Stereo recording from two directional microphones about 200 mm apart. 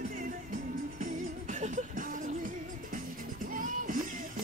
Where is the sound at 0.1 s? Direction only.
40° right (ahead or behind).